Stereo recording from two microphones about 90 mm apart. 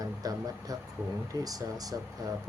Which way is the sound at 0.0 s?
45° right (ahead or behind).